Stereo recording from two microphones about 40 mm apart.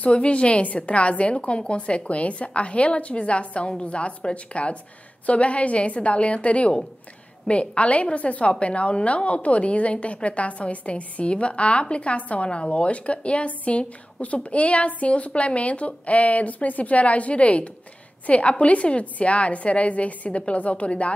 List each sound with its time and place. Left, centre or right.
0.0 s a woman's voice: left